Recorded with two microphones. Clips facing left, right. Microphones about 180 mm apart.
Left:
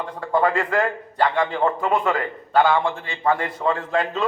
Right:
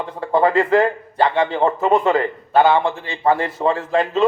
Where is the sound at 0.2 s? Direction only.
30° right (ahead or behind).